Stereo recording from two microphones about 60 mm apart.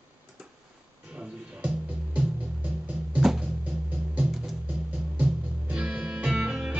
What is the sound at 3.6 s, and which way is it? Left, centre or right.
Music, right.